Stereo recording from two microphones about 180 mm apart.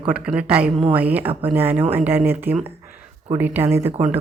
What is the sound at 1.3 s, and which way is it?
Speech, 30° right (ahead or behind).